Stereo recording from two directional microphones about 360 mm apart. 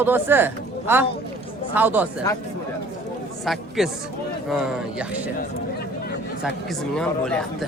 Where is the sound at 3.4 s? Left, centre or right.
Centre.